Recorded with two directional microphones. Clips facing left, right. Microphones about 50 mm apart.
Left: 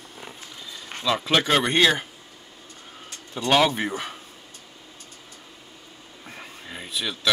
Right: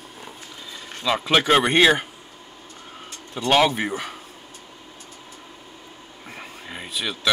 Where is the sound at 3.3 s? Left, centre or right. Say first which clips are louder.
Right 1 dB; centre.